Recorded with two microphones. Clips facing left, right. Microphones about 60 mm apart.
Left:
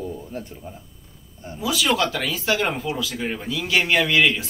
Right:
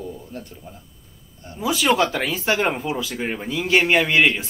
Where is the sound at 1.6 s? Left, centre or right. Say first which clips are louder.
Right 3 dB; right.